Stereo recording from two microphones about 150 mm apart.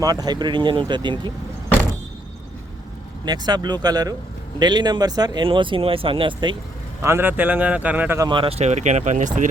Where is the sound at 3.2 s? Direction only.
30° right (ahead or behind).